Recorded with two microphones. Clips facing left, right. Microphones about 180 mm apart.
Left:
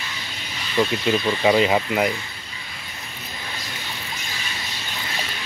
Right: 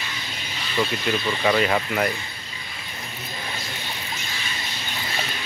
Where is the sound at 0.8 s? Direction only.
20° left (ahead or behind).